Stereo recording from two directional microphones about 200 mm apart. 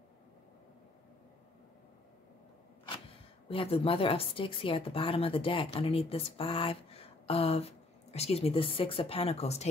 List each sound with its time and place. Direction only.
3.4 s speech: 30° left (ahead or behind)